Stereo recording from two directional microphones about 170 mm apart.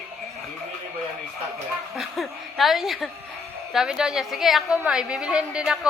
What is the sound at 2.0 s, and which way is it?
A woman's voice, centre (ahead or behind).